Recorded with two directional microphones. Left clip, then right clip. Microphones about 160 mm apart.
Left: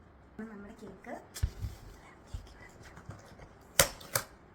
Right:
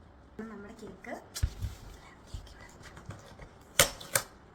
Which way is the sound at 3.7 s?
Centre (ahead or behind).